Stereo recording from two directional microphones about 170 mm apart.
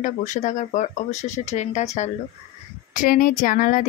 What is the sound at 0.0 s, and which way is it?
Speech, 45° left (ahead or behind).